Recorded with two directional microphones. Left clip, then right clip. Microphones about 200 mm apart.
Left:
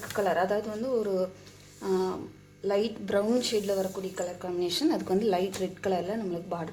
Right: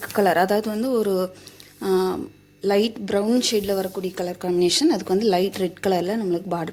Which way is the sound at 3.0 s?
30° right (ahead or behind).